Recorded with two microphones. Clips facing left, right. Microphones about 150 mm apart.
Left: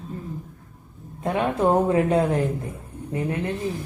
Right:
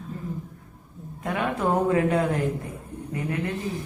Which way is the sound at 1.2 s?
25° left (ahead or behind).